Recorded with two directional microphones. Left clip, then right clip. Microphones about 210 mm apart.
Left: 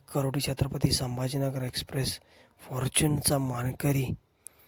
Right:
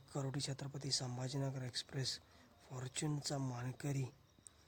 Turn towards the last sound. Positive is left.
turn(degrees=45)  # may be behind; listen again after turning